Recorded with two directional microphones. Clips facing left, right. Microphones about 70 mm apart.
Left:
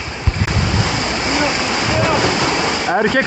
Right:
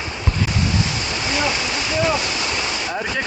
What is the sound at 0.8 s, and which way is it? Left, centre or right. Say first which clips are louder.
Waves: left 5 dB; left.